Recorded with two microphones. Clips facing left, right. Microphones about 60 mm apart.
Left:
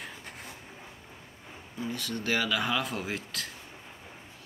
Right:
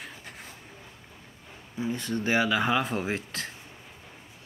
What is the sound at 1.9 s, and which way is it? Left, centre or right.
Speech, right.